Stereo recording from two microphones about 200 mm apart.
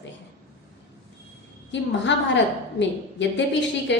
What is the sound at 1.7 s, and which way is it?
A woman's voice, 65° left (ahead or behind).